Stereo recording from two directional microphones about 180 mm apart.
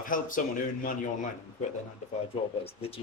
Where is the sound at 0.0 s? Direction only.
50° left (ahead or behind).